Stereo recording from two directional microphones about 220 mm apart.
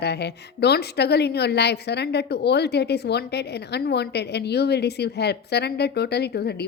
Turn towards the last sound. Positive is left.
turn(degrees=45)  # may be behind; listen again after turning